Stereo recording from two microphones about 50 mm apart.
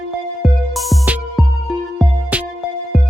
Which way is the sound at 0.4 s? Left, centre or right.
Centre.